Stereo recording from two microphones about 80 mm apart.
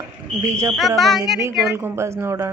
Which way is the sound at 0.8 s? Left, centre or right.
Centre.